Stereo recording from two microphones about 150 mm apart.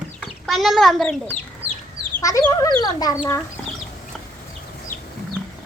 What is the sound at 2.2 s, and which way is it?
Speech, 25° left (ahead or behind).